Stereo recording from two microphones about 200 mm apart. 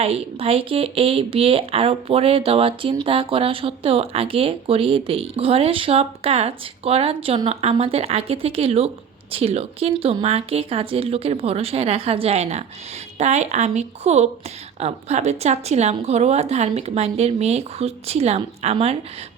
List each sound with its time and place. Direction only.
0.0 s speech: 30° right (ahead or behind)